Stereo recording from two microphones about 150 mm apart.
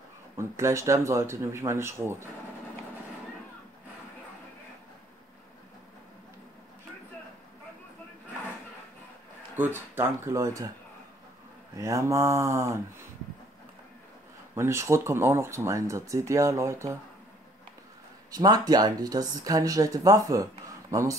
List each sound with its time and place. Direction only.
0.4 s speech: 20° right (ahead or behind)
9.8 s speech: 15° right (ahead or behind)
11.7 s speech: 20° right (ahead or behind)
14.5 s speech: 20° right (ahead or behind)
18.3 s speech: 25° right (ahead or behind)